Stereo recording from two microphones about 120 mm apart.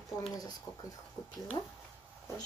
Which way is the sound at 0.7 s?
25° left (ahead or behind).